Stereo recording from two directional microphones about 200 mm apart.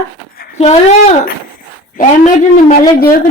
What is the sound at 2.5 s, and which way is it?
Speech, 40° left (ahead or behind).